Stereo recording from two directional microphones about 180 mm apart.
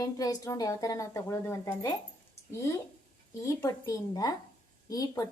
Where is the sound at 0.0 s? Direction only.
20° left (ahead or behind).